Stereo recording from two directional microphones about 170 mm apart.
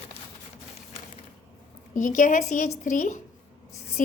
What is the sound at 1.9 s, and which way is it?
A woman's voice, 50° left (ahead or behind).